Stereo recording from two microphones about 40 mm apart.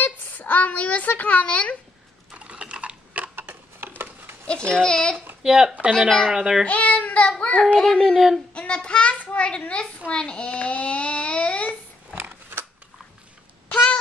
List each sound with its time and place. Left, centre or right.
0.0 s speech: left
2.3 s typing: right
3.3 s a sound: right
4.5 s a child's voice: left
5.4 s speech: centre
5.9 s speech: centre
6.3 s speech: centre
6.6 s speech: left
7.2 s a child's voice: left
8.0 s speech: centre
8.5 s child singing: left
9.6 s a child's voice: left